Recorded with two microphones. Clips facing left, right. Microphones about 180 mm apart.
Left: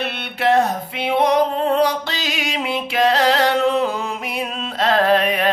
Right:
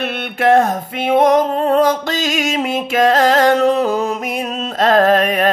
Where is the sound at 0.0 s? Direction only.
50° right (ahead or behind).